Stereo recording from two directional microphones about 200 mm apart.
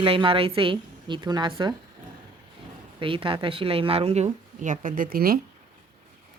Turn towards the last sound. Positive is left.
turn(degrees=-45)  # may be behind; listen again after turning